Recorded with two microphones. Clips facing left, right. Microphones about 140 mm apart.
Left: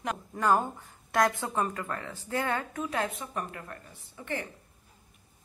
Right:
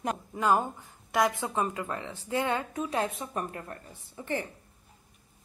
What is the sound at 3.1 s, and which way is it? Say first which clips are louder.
A woman's voice: right 2 dB; 30° right (ahead or behind).